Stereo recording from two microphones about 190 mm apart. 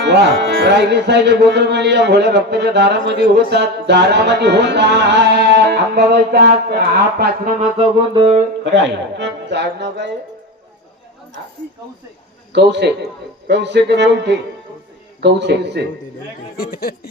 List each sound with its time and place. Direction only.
0.0 s music: 65° right (ahead or behind)
7.6 s music: 30° right (ahead or behind)
8.6 s music: 65° right (ahead or behind)
12.5 s music: 65° right (ahead or behind)
16.6 s speech: 55° left (ahead or behind)